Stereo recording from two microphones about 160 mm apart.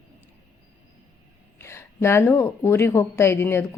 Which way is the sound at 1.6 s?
15° left (ahead or behind).